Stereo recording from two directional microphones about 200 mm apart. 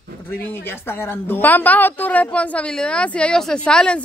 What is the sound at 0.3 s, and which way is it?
Speech, 10° left (ahead or behind).